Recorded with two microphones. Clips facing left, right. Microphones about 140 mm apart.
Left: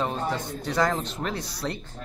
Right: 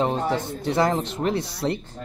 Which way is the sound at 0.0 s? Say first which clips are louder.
Right 5 dB; 25° right (ahead or behind).